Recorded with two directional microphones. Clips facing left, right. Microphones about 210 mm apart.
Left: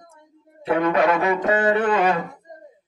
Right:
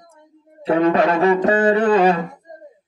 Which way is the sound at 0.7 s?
30° right (ahead or behind).